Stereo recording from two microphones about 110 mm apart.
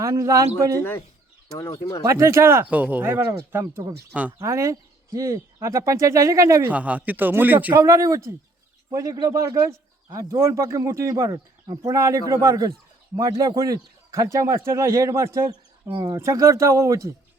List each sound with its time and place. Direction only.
0.0 s a man's voice: 30° right (ahead or behind)
0.8 s speech: 20° left (ahead or behind)
2.0 s speech: 25° right (ahead or behind)
2.6 s speech: 10° right (ahead or behind)
4.1 s a man's voice: 15° right (ahead or behind)
4.4 s speech: 30° right (ahead or behind)
6.7 s a man's voice: 15° right (ahead or behind)
7.8 s speech: 30° right (ahead or behind)